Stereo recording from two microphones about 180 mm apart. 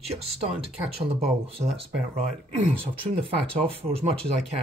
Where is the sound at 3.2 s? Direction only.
30° right (ahead or behind).